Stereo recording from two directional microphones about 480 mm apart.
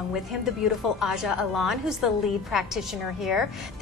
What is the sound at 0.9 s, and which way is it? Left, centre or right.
A woman's voice, centre.